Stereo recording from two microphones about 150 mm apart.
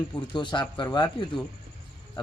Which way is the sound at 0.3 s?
30° left (ahead or behind).